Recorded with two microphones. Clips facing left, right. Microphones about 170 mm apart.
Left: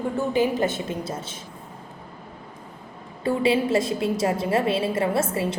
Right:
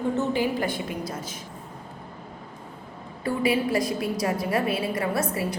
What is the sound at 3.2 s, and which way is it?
A woman's voice, 25° left (ahead or behind).